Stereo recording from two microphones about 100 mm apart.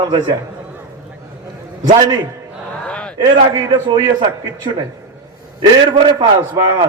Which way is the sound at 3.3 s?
55° right (ahead or behind).